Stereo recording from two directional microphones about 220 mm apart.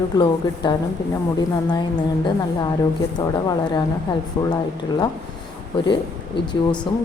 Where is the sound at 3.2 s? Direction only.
20° left (ahead or behind).